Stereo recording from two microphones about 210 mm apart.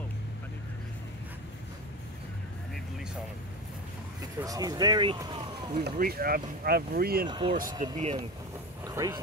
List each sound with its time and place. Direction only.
4.4 s speech: 15° right (ahead or behind)
5.8 s speech: 45° right (ahead or behind)
7.2 s speech: 20° right (ahead or behind)
7.8 s speech: 35° right (ahead or behind)
8.8 s speech: 15° right (ahead or behind)